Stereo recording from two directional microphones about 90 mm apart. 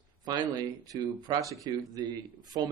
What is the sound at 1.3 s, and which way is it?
Speech, 50° right (ahead or behind).